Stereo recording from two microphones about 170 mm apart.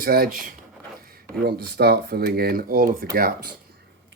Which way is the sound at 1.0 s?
60° right (ahead or behind).